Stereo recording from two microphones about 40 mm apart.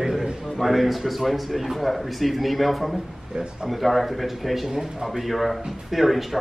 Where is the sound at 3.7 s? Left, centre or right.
Centre.